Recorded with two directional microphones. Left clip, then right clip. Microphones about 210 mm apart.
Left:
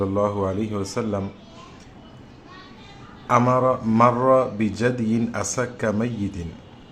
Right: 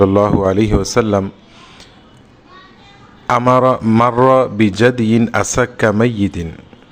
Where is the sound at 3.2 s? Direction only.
45° right (ahead or behind).